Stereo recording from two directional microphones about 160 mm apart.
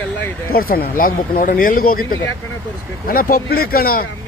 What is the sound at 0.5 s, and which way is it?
Speech, 65° left (ahead or behind).